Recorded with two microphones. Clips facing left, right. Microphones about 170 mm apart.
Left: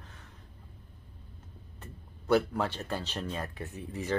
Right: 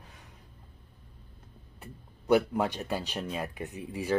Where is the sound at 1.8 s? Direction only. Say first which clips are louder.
Right 3 dB; 15° right (ahead or behind).